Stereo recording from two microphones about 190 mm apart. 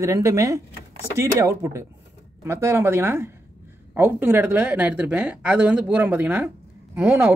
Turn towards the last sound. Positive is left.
turn(degrees=-15)  # may be behind; listen again after turning